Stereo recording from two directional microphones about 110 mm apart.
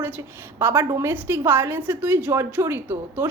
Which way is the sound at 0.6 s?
20° right (ahead or behind).